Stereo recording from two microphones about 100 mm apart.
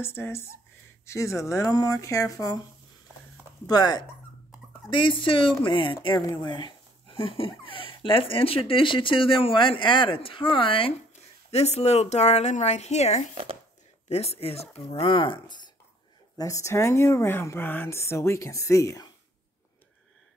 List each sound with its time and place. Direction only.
0.0 s speech: 25° left (ahead or behind)
3.6 s speech: 40° left (ahead or behind)
4.8 s speech: 60° left (ahead or behind)
11.5 s speech: 90° left
13.3 s speech: 75° right (ahead or behind)
14.0 s speech: 90° left
15.0 s speech: 60° left (ahead or behind)
16.3 s speech: 35° left (ahead or behind)